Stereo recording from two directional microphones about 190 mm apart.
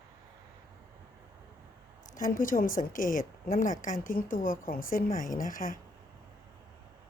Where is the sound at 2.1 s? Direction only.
45° left (ahead or behind).